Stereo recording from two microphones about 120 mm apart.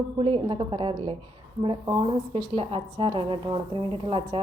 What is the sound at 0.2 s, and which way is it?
A woman's voice, 45° right (ahead or behind).